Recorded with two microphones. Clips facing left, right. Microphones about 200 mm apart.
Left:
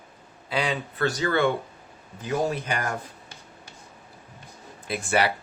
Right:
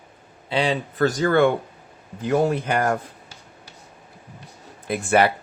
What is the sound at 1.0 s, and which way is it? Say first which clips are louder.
Speech: right 6 dB; 45° right (ahead or behind).